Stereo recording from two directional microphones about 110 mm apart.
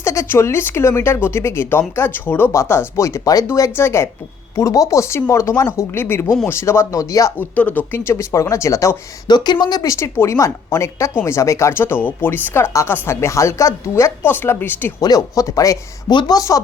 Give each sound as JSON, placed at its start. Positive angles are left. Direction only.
{"t": 0.0, "sound": "speech", "side_deg": 25}
{"t": 4.5, "sound": "speech", "side_deg": 30}
{"t": 7.3, "sound": "speech", "side_deg": 15}
{"t": 9.3, "sound": "speech", "side_deg": 40}
{"t": 15.0, "sound": "speech", "side_deg": 35}